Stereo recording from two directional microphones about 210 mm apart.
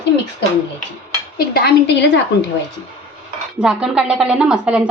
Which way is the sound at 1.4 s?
50° left (ahead or behind).